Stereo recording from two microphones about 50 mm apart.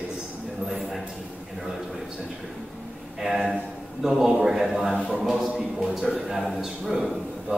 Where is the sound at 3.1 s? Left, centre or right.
Centre.